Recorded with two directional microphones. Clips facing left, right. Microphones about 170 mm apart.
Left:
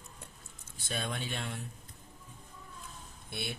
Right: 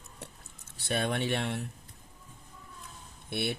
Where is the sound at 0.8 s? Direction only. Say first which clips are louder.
Right 7 dB; 65° right (ahead or behind).